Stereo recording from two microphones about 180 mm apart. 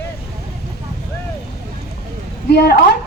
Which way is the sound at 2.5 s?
65° left (ahead or behind).